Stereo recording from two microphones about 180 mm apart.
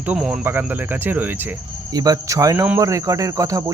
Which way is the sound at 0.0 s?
5° right (ahead or behind).